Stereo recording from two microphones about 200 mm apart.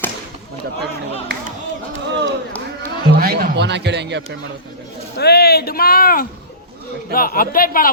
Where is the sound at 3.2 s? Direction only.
50° right (ahead or behind).